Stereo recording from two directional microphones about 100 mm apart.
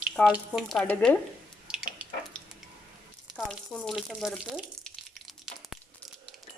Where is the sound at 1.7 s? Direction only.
10° right (ahead or behind).